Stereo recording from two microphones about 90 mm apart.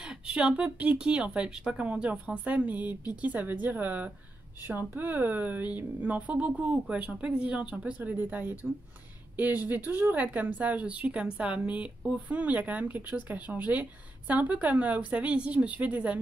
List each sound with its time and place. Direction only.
0.0 s speech: 10° right (ahead or behind)